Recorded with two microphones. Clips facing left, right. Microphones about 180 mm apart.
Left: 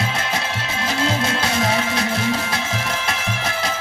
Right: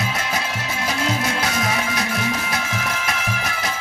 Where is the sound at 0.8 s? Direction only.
25° left (ahead or behind).